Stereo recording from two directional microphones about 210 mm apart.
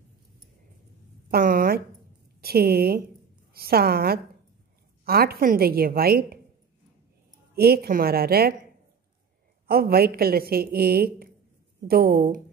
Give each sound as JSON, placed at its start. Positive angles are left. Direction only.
{"t": 1.3, "sound": "a woman's voice", "side_deg": -45}
{"t": 7.5, "sound": "a woman's voice", "side_deg": -50}
{"t": 9.7, "sound": "a woman's voice", "side_deg": -45}